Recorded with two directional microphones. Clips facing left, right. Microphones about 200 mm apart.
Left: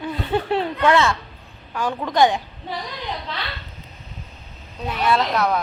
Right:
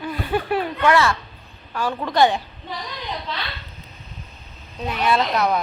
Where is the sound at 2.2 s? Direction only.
15° left (ahead or behind).